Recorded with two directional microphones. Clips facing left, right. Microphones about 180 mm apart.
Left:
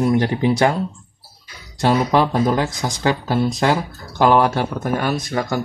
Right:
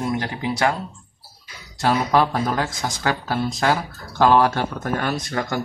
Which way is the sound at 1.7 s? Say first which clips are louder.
Left 2 dB; 25° left (ahead or behind).